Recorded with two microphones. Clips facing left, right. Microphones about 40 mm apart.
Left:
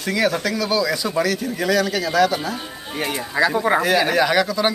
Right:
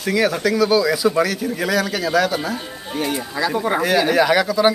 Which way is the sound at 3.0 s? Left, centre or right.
Left.